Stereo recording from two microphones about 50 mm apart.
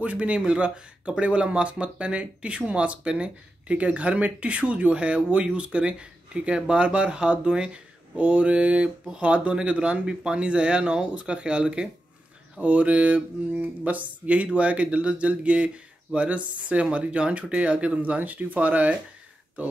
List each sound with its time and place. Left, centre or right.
0.0 s speech: right